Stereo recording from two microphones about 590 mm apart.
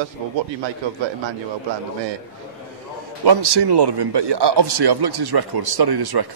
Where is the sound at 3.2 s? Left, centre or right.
Right.